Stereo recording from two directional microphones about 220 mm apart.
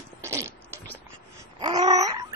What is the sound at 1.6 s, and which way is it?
Babbling, 20° right (ahead or behind).